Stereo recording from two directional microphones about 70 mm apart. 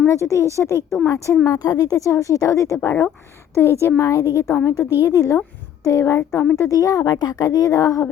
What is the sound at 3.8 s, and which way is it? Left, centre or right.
A woman's voice, left.